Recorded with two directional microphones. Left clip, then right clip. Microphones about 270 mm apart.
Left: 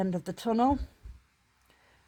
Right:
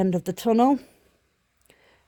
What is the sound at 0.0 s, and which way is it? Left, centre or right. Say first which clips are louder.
Speech: right 8 dB; right.